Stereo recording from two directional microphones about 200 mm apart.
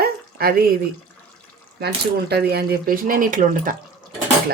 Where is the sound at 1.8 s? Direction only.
50° right (ahead or behind).